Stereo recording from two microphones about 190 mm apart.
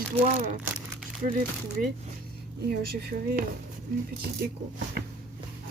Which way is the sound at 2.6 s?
55° right (ahead or behind).